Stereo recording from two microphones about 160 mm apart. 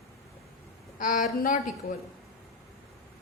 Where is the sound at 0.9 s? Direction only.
55° left (ahead or behind).